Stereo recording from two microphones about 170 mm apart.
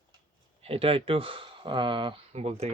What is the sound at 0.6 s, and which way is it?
Speech, 35° right (ahead or behind).